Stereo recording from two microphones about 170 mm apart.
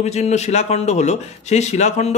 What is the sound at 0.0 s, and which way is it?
A man's voice, 40° left (ahead or behind).